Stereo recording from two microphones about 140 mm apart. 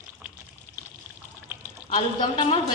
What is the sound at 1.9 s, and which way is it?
Speech, 40° left (ahead or behind).